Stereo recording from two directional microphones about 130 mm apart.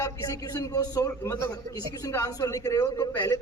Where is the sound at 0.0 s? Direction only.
30° left (ahead or behind).